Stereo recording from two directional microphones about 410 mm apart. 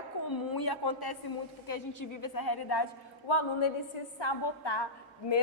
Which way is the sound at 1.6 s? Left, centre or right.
Left.